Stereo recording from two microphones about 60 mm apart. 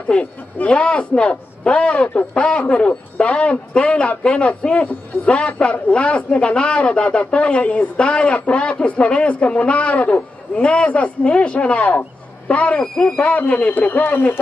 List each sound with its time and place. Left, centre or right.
0.1 s a man's voice: left
13.2 s a man's voice: left